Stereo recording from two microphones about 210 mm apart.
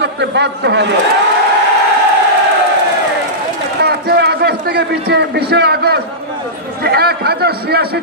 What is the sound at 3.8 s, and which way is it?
A man's voice, 50° right (ahead or behind).